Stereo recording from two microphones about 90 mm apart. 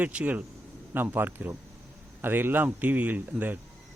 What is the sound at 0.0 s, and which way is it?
Speech, 15° right (ahead or behind).